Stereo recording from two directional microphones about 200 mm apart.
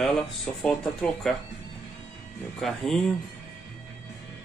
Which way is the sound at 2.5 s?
Centre (ahead or behind).